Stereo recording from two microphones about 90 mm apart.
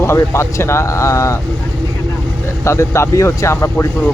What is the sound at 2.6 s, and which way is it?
Speech, 30° left (ahead or behind).